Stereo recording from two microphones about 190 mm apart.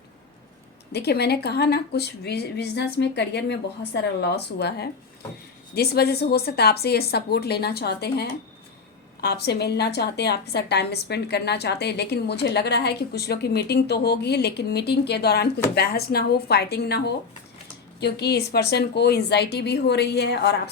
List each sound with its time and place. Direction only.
0.9 s a woman's voice: 60° left (ahead or behind)